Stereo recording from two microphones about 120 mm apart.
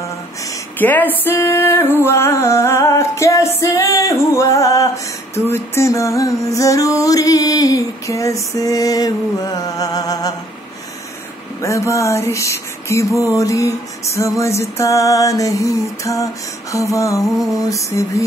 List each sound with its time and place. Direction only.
0.7 s music: 15° left (ahead or behind); by 10.3 s 30° left (ahead or behind)
11.6 s music: 25° left (ahead or behind)